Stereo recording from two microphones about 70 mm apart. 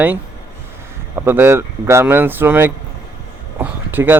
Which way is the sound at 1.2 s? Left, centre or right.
Right.